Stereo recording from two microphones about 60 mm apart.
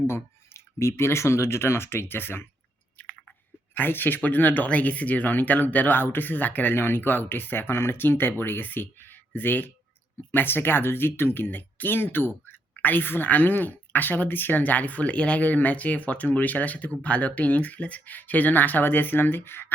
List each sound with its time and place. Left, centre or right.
0.1 s speech: left
3.8 s speech: left